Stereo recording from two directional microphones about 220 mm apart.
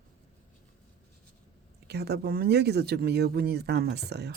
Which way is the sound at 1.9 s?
50° right (ahead or behind).